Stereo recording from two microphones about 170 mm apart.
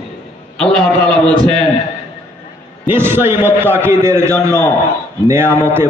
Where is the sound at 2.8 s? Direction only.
15° right (ahead or behind).